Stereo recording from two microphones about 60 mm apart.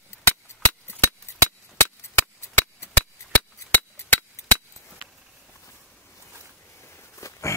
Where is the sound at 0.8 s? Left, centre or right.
Left.